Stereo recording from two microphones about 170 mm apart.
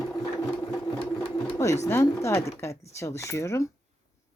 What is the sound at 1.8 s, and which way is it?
A woman's voice, 15° left (ahead or behind).